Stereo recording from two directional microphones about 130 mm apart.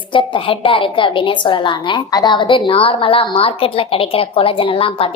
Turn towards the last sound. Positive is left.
turn(degrees=45)  # may be behind; listen again after turning